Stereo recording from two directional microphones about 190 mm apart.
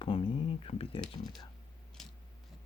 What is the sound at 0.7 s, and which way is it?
Speech, 30° left (ahead or behind).